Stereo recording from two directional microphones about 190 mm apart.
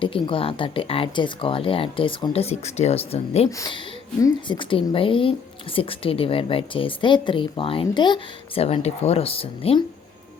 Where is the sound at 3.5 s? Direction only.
20° left (ahead or behind).